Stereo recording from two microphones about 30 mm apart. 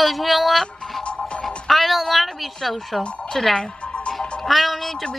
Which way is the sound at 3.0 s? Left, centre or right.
Left.